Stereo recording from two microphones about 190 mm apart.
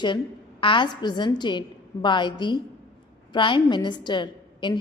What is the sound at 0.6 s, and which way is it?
A woman's voice, 25° left (ahead or behind).